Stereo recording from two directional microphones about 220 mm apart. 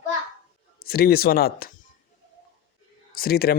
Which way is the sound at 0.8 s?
45° left (ahead or behind).